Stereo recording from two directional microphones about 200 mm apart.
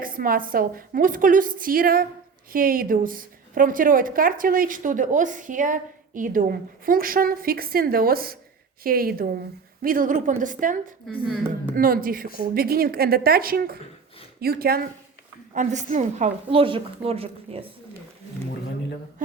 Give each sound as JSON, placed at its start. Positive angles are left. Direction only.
{"t": 0.0, "sound": "a woman's voice", "side_deg": -45}
{"t": 15.5, "sound": "a woman's voice", "side_deg": -40}